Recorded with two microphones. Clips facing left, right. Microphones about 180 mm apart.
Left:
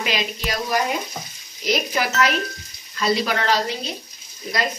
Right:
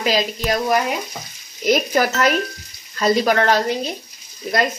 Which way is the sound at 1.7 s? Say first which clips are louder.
Right 5 dB; 45° right (ahead or behind).